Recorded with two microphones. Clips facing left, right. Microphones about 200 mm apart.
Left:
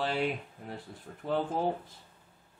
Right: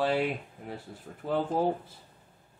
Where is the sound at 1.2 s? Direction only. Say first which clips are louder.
Right 3 dB; 5° right (ahead or behind).